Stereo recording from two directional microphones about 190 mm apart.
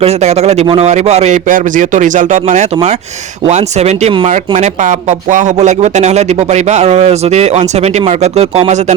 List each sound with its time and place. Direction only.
0.0 s speech: 35° right (ahead or behind)